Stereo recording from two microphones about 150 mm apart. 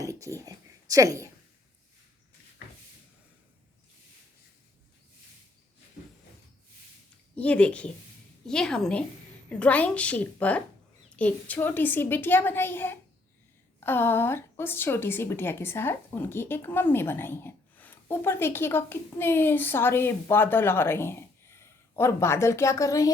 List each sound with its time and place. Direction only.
0.0 s a sound: 20° right (ahead or behind)
0.3 s speech: 25° right (ahead or behind)
7.3 s a woman's voice: 10° left (ahead or behind)